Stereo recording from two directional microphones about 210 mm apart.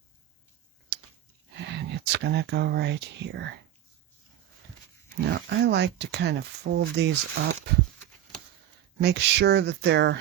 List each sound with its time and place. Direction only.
0.9 s a sound: 55° right (ahead or behind)
1.5 s speech: 55° right (ahead or behind)
5.2 s speech: 50° right (ahead or behind)
9.0 s speech: 50° right (ahead or behind)